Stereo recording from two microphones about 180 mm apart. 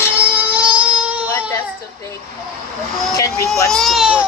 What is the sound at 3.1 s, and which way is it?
Speech, 20° left (ahead or behind).